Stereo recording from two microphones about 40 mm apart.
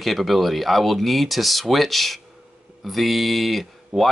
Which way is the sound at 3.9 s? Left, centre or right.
Centre.